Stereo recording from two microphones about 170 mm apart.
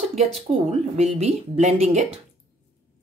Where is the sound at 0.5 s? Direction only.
40° right (ahead or behind).